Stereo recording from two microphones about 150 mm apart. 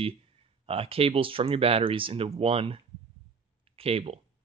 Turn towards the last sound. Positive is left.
turn(degrees=-40)  # may be behind; listen again after turning